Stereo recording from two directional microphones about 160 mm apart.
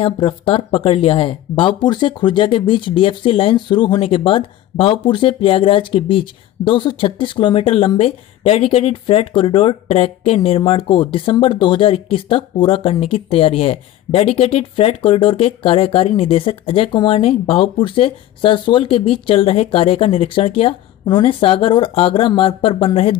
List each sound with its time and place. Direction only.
0.0 s speech: 35° left (ahead or behind)